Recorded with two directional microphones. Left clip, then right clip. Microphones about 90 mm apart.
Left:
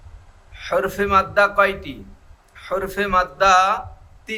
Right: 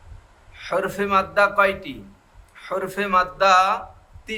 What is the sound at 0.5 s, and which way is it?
A man's voice, 20° left (ahead or behind).